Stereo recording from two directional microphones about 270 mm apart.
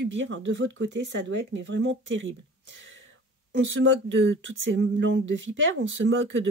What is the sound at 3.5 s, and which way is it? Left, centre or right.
Speech, right.